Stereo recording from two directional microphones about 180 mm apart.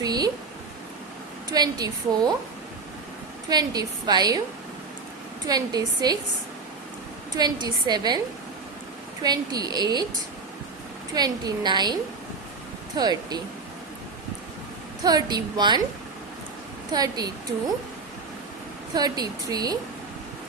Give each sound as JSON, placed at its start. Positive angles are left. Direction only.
{"t": 0.0, "sound": "a sound", "side_deg": -20}
{"t": 1.5, "sound": "speech", "side_deg": -20}
{"t": 3.5, "sound": "speech", "side_deg": -20}
{"t": 5.5, "sound": "speech", "side_deg": -20}
{"t": 7.3, "sound": "speech", "side_deg": -25}
{"t": 9.2, "sound": "speech", "side_deg": -20}
{"t": 11.1, "sound": "speech", "side_deg": -20}
{"t": 13.0, "sound": "speech", "side_deg": -20}
{"t": 15.0, "sound": "speech", "side_deg": -20}
{"t": 16.9, "sound": "speech", "side_deg": -20}
{"t": 18.9, "sound": "speech", "side_deg": -20}